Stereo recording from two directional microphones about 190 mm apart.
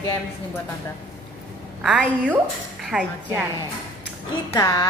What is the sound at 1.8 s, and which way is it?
A woman's voice, 5° right (ahead or behind).